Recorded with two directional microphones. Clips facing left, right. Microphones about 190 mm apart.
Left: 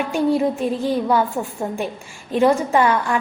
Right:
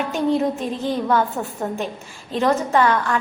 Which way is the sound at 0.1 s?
10° left (ahead or behind).